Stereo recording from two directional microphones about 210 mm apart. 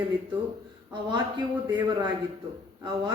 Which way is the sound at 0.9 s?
20° right (ahead or behind).